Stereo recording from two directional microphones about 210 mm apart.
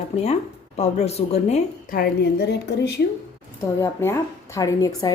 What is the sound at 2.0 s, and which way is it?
Speech, 50° left (ahead or behind).